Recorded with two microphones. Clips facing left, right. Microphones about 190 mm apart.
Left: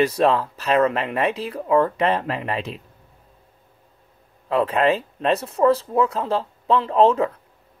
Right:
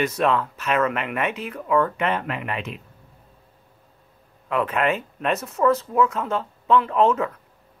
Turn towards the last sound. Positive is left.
turn(degrees=30)  # may be behind; listen again after turning